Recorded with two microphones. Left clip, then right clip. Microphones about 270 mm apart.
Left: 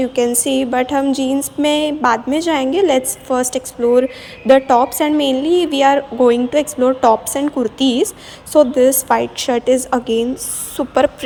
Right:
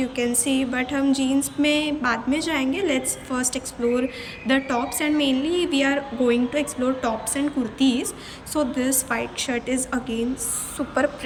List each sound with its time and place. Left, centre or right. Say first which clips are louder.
0.0 s a woman's voice: left 8 dB; centre